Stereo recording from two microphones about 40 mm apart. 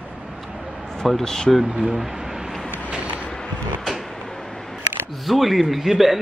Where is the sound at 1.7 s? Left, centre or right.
Centre.